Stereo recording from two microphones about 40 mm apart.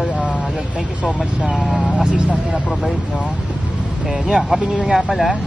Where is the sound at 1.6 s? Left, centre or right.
Centre.